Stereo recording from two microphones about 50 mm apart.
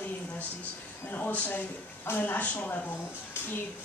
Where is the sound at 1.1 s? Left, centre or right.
Left.